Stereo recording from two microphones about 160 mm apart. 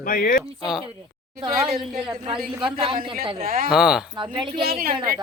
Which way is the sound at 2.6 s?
35° right (ahead or behind).